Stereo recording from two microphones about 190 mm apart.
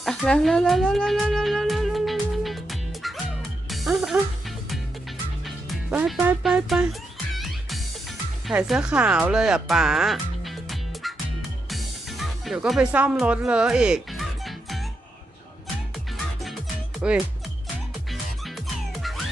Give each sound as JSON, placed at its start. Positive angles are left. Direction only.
{"t": 0.0, "sound": "music", "side_deg": 5}
{"t": 5.5, "sound": "speech", "side_deg": -5}
{"t": 7.3, "sound": "music", "side_deg": 0}
{"t": 8.4, "sound": "speech", "side_deg": 0}
{"t": 11.7, "sound": "music", "side_deg": 0}
{"t": 16.1, "sound": "music", "side_deg": 0}
{"t": 18.1, "sound": "music", "side_deg": 0}